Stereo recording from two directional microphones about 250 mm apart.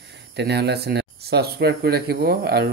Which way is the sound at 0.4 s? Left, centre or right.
Right.